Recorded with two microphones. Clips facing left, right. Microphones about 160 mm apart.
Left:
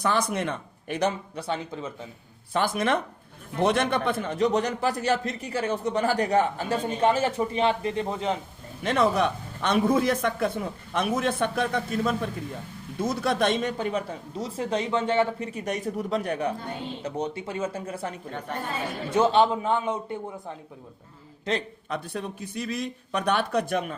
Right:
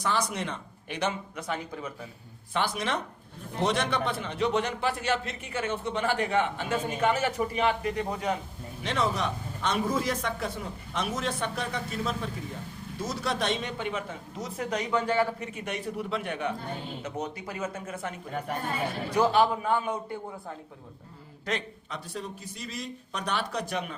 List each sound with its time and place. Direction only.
0.0 s speech: 55° left (ahead or behind); by 2.0 s 25° left (ahead or behind)
2.5 s a man's voice: 45° left (ahead or behind); by 8.4 s 25° left (ahead or behind)
8.8 s a man's voice: 50° left (ahead or behind); by 18.1 s 30° left (ahead or behind)
18.3 s a woman's voice: 10° right (ahead or behind)
19.1 s a man's voice: 25° left (ahead or behind)
21.5 s a man's voice: 25° left (ahead or behind)
21.8 s speech: 60° left (ahead or behind)